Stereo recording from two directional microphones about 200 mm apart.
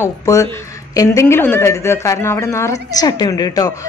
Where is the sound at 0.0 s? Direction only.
15° left (ahead or behind).